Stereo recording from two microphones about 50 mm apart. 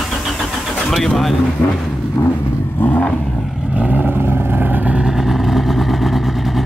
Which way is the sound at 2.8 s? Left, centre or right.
Left.